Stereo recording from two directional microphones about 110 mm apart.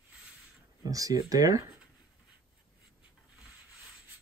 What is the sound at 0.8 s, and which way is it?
Speech, 30° right (ahead or behind).